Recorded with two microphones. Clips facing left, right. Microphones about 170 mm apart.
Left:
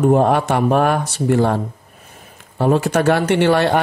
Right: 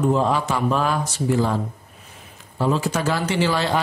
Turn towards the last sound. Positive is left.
turn(degrees=60)  # may be behind; listen again after turning